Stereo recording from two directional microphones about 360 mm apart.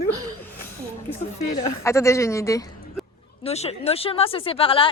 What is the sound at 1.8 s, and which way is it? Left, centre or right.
Speech, centre.